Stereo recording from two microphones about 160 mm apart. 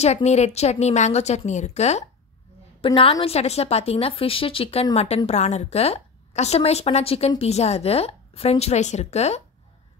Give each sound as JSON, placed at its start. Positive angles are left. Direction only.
{"t": 0.0, "sound": "a woman's voice", "side_deg": 45}